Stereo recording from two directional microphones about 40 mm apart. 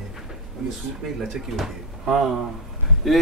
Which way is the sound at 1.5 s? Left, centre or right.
Centre.